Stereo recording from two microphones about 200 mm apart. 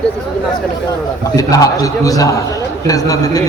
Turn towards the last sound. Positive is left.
turn(degrees=15)  # may be behind; listen again after turning